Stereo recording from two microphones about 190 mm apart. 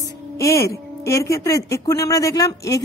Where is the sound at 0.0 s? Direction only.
15° left (ahead or behind).